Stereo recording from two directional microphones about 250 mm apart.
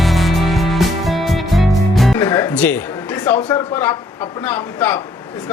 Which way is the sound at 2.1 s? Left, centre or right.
Centre.